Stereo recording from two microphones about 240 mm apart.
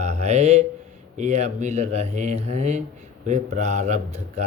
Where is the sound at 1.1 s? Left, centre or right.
Right.